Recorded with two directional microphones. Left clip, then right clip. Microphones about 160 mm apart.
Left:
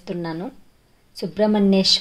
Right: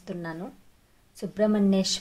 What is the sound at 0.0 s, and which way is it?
Speech, 20° left (ahead or behind).